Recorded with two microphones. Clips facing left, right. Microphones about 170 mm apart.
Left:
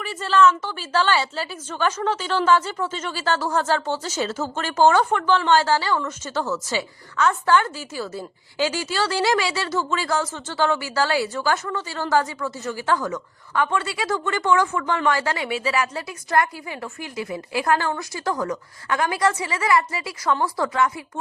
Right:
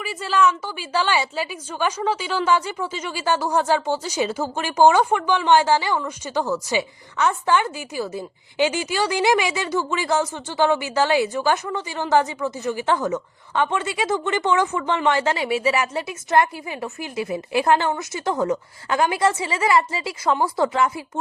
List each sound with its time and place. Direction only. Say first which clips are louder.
0.0 s a woman's voice: left 2 dB; 10° right (ahead or behind); by 21.0 s 25° right (ahead or behind)